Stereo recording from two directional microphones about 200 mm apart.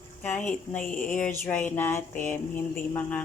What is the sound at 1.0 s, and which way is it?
Speech, 5° left (ahead or behind).